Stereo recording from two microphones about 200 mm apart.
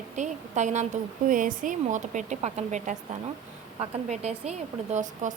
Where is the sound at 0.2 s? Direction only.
35° right (ahead or behind).